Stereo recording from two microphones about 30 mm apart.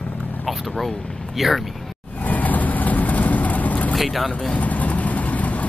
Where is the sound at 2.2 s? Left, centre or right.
Left.